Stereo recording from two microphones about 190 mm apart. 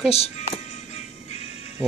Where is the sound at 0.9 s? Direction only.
35° left (ahead or behind).